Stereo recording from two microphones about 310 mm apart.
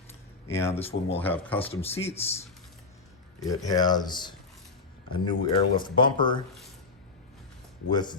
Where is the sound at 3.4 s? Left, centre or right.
Centre.